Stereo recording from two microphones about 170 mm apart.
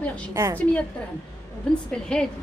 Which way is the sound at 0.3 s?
15° right (ahead or behind).